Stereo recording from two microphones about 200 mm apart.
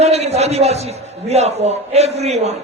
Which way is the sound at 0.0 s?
30° right (ahead or behind).